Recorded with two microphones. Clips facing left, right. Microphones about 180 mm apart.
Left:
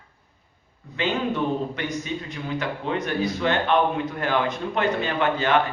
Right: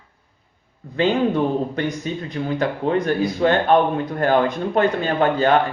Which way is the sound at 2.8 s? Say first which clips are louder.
Right 6 dB; 40° right (ahead or behind).